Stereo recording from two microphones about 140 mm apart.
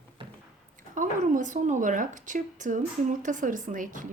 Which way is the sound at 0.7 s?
65° right (ahead or behind).